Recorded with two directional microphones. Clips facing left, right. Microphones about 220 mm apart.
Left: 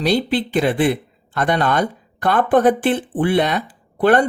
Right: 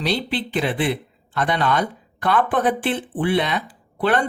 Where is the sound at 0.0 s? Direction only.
45° left (ahead or behind).